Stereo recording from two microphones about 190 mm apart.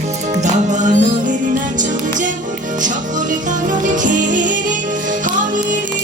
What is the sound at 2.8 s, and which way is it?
Music, 40° right (ahead or behind).